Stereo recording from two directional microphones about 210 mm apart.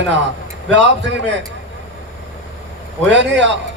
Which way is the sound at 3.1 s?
55° right (ahead or behind).